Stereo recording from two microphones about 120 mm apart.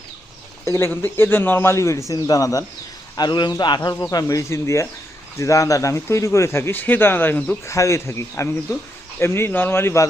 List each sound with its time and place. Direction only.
0.6 s speech: 25° left (ahead or behind)